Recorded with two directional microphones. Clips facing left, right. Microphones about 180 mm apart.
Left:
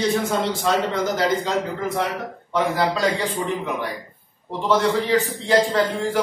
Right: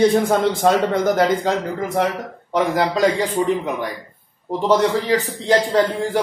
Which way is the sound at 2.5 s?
40° right (ahead or behind).